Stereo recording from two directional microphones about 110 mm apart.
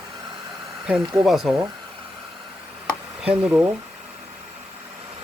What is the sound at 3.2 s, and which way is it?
Speech, 10° right (ahead or behind).